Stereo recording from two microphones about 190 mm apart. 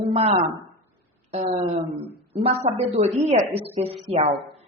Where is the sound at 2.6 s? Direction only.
35° right (ahead or behind).